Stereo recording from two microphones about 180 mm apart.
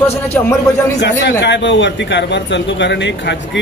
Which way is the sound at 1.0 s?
75° left (ahead or behind).